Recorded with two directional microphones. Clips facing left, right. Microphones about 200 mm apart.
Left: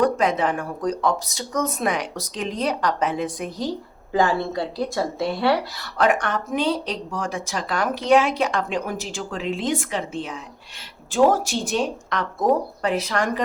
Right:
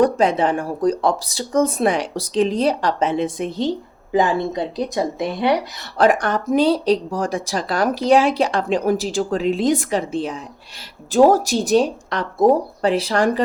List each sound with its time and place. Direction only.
0.0 s speech: 30° right (ahead or behind)
6.0 s speech: 35° right (ahead or behind)